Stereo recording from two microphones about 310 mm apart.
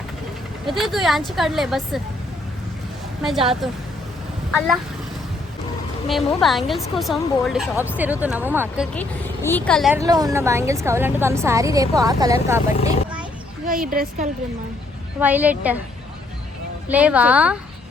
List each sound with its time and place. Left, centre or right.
0.6 s speech: centre
3.6 s speech: centre
6.1 s a woman's voice: centre
13.7 s a woman's voice: right
15.2 s speech: centre
16.9 s speech: centre